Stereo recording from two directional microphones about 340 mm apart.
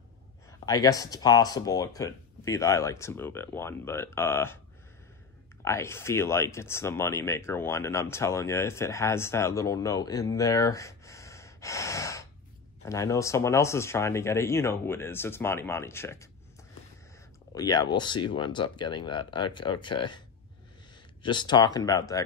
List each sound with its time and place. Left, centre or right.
0.5 s speech: centre
5.6 s speech: centre
17.6 s speech: centre
21.2 s speech: centre